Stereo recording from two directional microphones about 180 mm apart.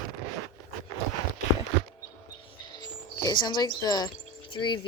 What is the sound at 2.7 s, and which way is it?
Speech, 25° left (ahead or behind).